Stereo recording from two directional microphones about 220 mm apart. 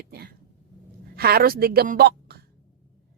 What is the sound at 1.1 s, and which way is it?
A woman's voice, 45° right (ahead or behind).